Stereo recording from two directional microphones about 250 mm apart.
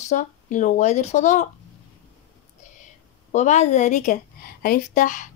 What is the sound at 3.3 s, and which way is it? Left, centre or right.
A woman's voice, left.